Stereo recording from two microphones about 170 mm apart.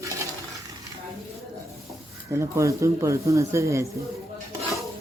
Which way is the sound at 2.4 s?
15° right (ahead or behind).